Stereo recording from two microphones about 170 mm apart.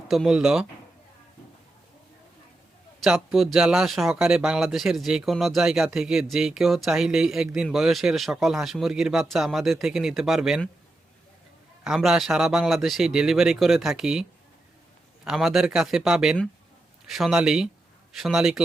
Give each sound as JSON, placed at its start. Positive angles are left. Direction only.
{"t": 0.1, "sound": "speech", "side_deg": 0}
{"t": 3.0, "sound": "speech", "side_deg": 0}
{"t": 11.8, "sound": "speech", "side_deg": -5}